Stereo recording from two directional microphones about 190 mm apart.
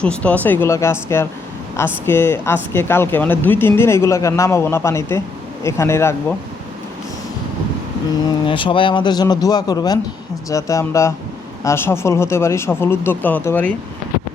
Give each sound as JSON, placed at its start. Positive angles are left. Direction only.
{"t": 0.0, "sound": "speech", "side_deg": 5}
{"t": 8.4, "sound": "speech", "side_deg": 25}